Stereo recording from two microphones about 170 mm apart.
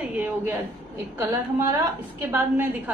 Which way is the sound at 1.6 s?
15° right (ahead or behind).